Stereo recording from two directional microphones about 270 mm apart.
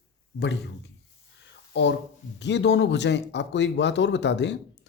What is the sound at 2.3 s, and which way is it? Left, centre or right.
Speech, left.